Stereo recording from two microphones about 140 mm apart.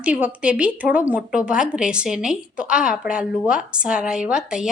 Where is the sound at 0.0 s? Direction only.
10° right (ahead or behind).